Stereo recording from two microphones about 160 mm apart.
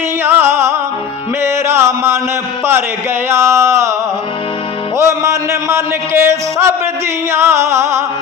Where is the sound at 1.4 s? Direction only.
15° right (ahead or behind).